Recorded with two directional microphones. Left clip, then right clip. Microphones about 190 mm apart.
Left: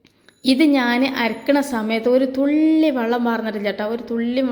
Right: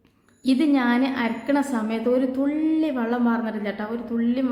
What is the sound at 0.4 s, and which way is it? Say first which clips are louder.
A woman's voice: left 5 dB; 25° left (ahead or behind).